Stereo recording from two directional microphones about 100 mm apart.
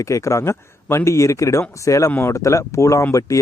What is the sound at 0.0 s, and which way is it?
Speech, 30° left (ahead or behind).